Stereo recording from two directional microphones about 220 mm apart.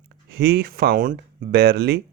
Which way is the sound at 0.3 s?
45° right (ahead or behind).